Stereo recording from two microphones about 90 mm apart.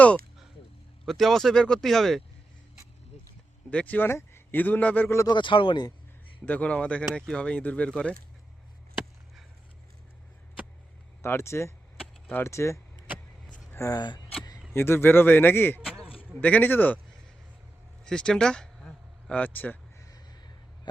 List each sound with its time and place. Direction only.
1.0 s speech: 5° left (ahead or behind)
3.7 s speech: 15° left (ahead or behind)
5.3 s speech: 65° left (ahead or behind)
6.4 s speech: 15° left (ahead or behind)
11.2 s speech: 30° left (ahead or behind)
13.9 s speech: 55° left (ahead or behind)
14.7 s speech: 25° left (ahead or behind)
15.8 s a sound: 5° right (ahead or behind)
16.4 s speech: 20° left (ahead or behind)
18.0 s a sound: 10° left (ahead or behind)
20.0 s a sound: 45° left (ahead or behind)